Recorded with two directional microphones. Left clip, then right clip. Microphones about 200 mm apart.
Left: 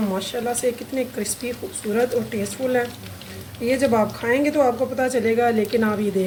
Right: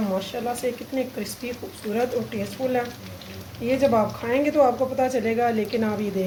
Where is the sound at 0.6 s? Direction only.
20° left (ahead or behind).